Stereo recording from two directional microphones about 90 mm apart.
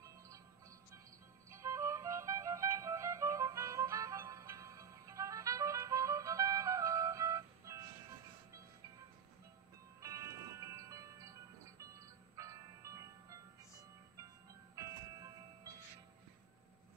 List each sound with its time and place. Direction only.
1.5 s music: 35° right (ahead or behind)
10.0 s music: 35° right (ahead or behind)
14.8 s music: 35° right (ahead or behind)